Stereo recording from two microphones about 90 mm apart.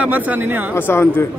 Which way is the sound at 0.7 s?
25° left (ahead or behind).